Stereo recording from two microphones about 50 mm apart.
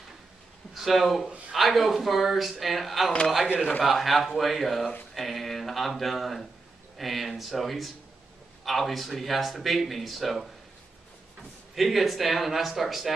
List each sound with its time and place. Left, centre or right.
0.7 s speech: centre
11.7 s speech: centre